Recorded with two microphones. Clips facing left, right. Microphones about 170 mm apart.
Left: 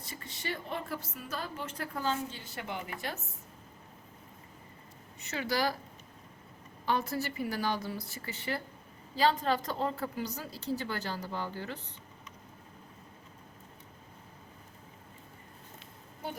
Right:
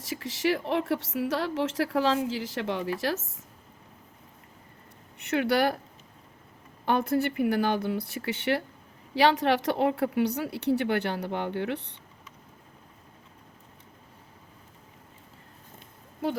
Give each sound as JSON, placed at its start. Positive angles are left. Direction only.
{"t": 0.0, "sound": "a woman's voice", "side_deg": -90}
{"t": 5.1, "sound": "speech", "side_deg": -60}
{"t": 6.8, "sound": "speech", "side_deg": -60}